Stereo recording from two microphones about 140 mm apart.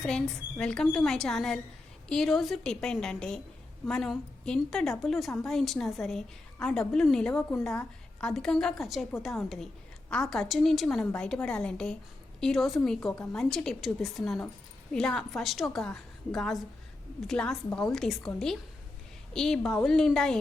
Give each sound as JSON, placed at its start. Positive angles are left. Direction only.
{"t": 0.6, "sound": "a woman's voice", "side_deg": 5}
{"t": 19.3, "sound": "a woman's voice", "side_deg": 5}